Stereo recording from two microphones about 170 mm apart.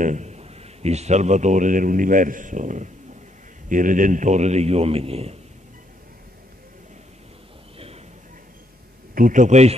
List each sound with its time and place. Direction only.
0.0 s a man's voice: 45° right (ahead or behind)
9.1 s a man's voice: 50° right (ahead or behind)